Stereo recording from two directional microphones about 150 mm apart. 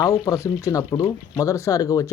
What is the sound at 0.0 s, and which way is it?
Speech, 25° left (ahead or behind).